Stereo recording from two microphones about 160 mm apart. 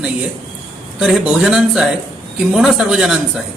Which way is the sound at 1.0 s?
Centre (ahead or behind).